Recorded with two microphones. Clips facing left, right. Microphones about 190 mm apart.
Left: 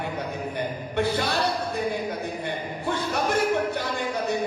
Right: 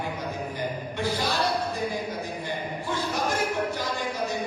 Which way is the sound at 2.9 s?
60° left (ahead or behind).